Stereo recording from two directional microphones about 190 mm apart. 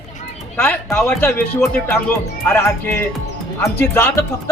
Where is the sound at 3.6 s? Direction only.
10° left (ahead or behind).